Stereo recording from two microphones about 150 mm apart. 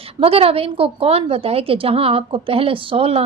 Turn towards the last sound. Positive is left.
turn(degrees=-40)  # may be behind; listen again after turning